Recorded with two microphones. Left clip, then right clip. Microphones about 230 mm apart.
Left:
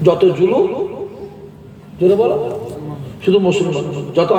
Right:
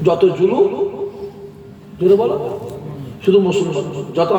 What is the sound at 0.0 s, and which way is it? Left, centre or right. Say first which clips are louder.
Speech: left 1 dB; left.